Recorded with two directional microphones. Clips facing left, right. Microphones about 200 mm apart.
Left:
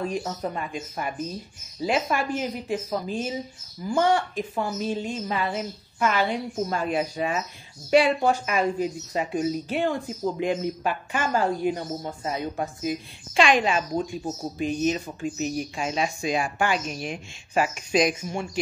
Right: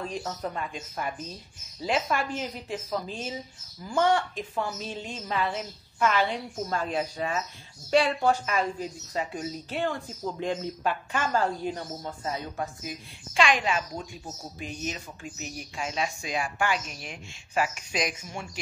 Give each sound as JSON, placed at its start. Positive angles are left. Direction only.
{"t": 0.0, "sound": "speech", "side_deg": 10}